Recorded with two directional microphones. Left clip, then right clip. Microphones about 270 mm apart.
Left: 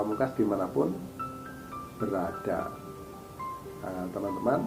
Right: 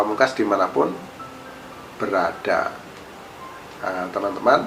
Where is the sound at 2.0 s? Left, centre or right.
Centre.